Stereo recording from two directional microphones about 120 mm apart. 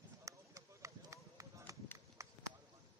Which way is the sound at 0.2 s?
25° right (ahead or behind).